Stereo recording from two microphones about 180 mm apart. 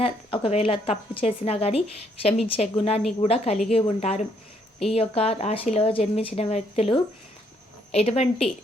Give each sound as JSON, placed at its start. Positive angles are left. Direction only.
{"t": 0.0, "sound": "speech", "side_deg": 35}